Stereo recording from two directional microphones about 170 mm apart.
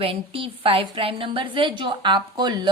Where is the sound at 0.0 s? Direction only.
30° right (ahead or behind).